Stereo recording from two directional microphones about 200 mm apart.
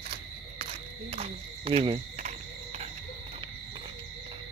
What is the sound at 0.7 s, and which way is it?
Speech, 30° right (ahead or behind).